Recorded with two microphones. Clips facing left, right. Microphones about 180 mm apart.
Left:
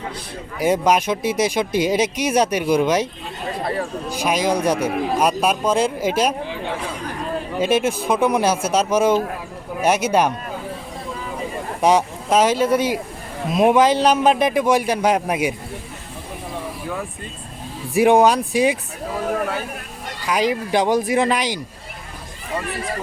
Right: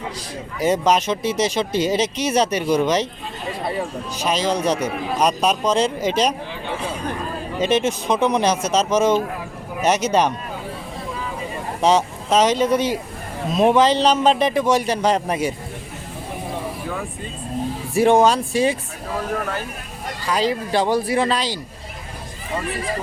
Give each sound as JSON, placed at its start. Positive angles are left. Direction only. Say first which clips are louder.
{"t": 0.6, "sound": "speech", "louder": "left 1 dB", "side_deg": 10}
{"t": 4.1, "sound": "speech", "louder": "left 2 dB", "side_deg": 10}
{"t": 7.6, "sound": "speech", "louder": "even", "side_deg": 10}
{"t": 11.8, "sound": "speech", "louder": "left 1 dB", "side_deg": 10}
{"t": 17.9, "sound": "speech", "louder": "left 1 dB", "side_deg": 15}
{"t": 20.2, "sound": "speech", "louder": "left 1 dB", "side_deg": 15}